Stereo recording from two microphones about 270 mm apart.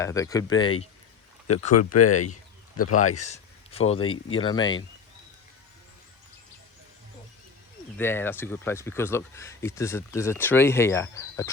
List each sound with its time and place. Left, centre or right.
0.0 s speech: centre
1.7 s speech: left
3.3 s a sound: left
3.9 s speech: centre
7.9 s speech: centre